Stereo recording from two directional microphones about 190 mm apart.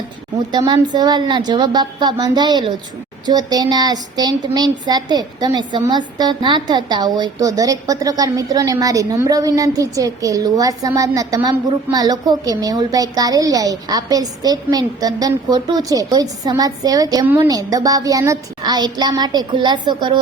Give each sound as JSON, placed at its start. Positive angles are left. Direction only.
{"t": 0.5, "sound": "speech", "side_deg": -20}